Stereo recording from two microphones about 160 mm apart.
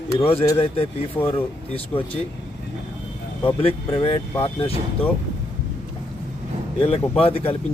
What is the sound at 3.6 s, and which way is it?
Speech, 35° left (ahead or behind).